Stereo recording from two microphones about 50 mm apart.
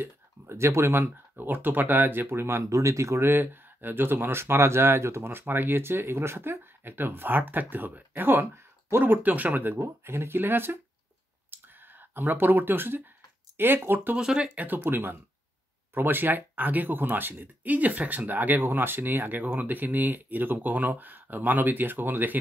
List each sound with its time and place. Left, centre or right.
0.5 s speech: right
9.8 s speech: right
12.1 s speech: right
14.1 s speech: centre
14.5 s speech: right